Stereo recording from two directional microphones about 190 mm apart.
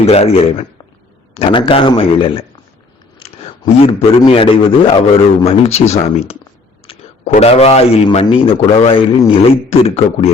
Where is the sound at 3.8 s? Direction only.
30° left (ahead or behind).